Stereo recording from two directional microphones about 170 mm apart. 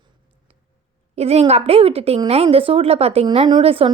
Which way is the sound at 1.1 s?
40° right (ahead or behind).